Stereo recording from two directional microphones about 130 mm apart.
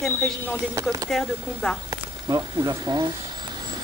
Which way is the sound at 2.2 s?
30° right (ahead or behind).